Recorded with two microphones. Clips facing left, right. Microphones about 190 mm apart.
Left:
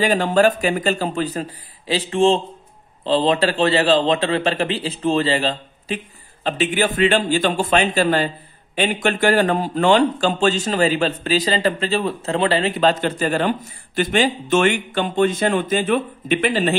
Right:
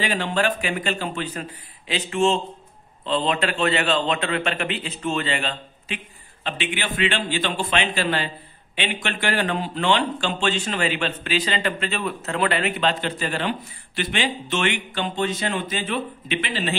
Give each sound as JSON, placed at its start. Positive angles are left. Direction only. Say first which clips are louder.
{"t": 0.0, "sound": "a man's voice", "louder": "left 7 dB", "side_deg": 40}